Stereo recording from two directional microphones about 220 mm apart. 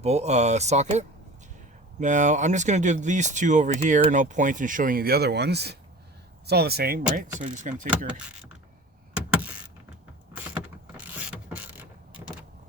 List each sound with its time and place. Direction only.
0.0 s speech: 30° right (ahead or behind)
10.9 s mechanisms: 5° right (ahead or behind)